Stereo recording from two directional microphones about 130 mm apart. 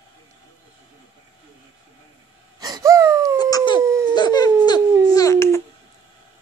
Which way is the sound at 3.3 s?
30° left (ahead or behind).